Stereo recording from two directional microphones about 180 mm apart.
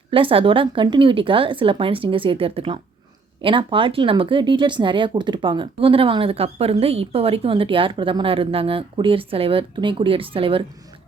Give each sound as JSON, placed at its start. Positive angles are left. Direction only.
{"t": 0.1, "sound": "speech", "side_deg": -30}